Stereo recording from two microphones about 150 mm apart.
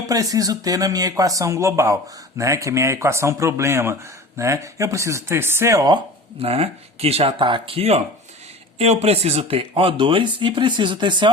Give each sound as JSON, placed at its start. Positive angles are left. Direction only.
{"t": 0.1, "sound": "speech", "side_deg": -25}
{"t": 6.4, "sound": "speech", "side_deg": -40}